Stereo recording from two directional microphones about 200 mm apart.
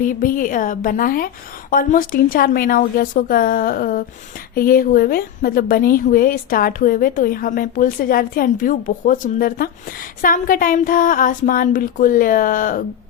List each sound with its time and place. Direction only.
0.0 s a woman's voice: 45° left (ahead or behind)